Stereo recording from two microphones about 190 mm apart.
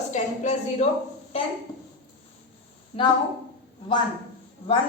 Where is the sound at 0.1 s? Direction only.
35° left (ahead or behind).